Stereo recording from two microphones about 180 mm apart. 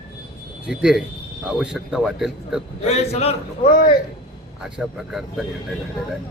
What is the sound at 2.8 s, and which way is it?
Speech, 35° left (ahead or behind).